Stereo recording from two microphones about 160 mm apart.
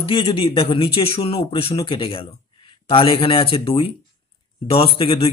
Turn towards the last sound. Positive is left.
turn(degrees=35)  # may be behind; listen again after turning